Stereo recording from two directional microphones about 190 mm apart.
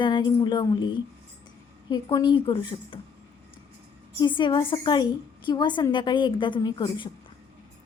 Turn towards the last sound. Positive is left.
turn(degrees=25)  # may be behind; listen again after turning